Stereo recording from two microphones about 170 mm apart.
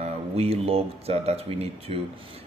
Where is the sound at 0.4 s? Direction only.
35° right (ahead or behind).